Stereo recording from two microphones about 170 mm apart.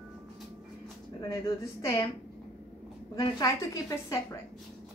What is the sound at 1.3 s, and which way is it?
Speech, 20° left (ahead or behind).